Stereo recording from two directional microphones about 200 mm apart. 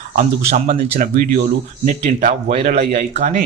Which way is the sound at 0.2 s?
40° right (ahead or behind).